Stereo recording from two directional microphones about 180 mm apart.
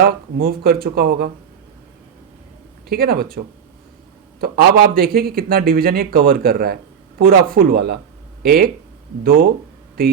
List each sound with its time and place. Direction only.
0.0 s a man's voice: 55° right (ahead or behind)
2.9 s a man's voice: 55° right (ahead or behind)